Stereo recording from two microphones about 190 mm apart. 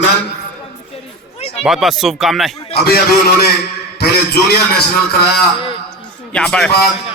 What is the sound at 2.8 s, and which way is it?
A man's voice, 55° left (ahead or behind).